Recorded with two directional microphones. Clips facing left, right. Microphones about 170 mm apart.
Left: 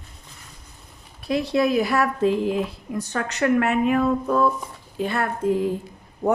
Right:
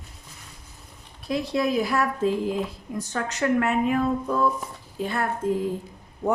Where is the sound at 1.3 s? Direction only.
70° left (ahead or behind).